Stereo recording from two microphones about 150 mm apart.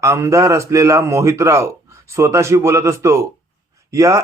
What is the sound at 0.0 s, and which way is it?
A man's voice, 20° right (ahead or behind).